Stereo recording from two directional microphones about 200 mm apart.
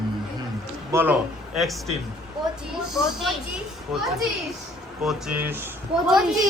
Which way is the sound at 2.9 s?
Centre (ahead or behind).